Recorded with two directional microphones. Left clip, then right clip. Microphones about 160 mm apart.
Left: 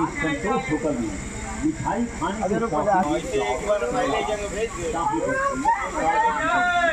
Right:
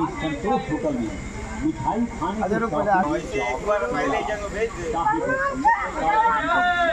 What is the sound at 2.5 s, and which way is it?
Speech, 30° left (ahead or behind).